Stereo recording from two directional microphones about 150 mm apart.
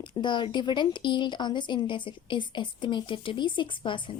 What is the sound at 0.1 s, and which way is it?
A woman's voice, 30° left (ahead or behind).